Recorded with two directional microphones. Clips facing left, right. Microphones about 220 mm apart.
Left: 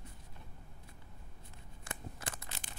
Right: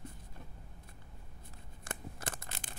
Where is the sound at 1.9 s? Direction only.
50° right (ahead or behind).